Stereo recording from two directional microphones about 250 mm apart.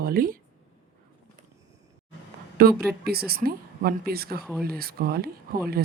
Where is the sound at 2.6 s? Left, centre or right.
Right.